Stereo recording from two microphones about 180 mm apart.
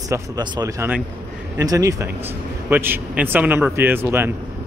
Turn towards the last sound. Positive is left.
turn(degrees=-15)  # may be behind; listen again after turning